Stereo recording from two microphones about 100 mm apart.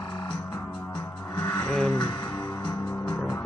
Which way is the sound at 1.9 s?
50° left (ahead or behind).